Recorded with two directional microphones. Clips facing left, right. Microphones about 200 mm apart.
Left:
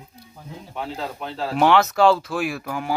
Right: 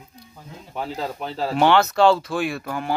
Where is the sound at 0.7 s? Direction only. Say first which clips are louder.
Right 2 dB; 40° right (ahead or behind).